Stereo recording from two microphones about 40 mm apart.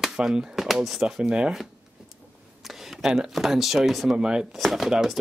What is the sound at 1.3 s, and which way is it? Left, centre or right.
Speech, right.